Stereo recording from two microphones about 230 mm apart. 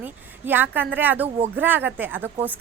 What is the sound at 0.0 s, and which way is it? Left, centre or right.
A woman's voice, centre.